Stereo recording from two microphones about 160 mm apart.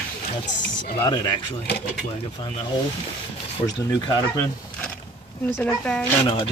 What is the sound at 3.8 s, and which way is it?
Speech, 25° left (ahead or behind).